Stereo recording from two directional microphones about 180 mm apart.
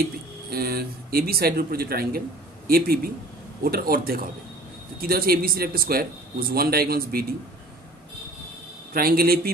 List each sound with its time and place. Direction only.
0.5 s a man's voice: 55° right (ahead or behind)
8.9 s a man's voice: 55° right (ahead or behind)